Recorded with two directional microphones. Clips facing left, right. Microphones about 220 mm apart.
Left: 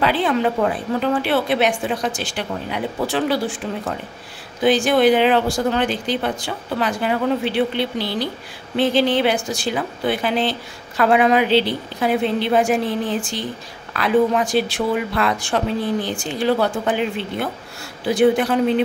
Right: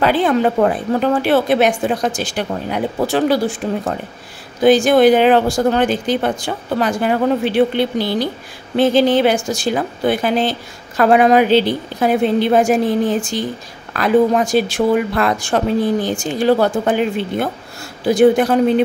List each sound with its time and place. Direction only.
0.0 s a woman's voice: 45° right (ahead or behind)